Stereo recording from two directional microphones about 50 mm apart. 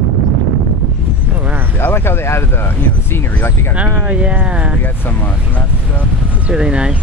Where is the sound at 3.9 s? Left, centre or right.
Right.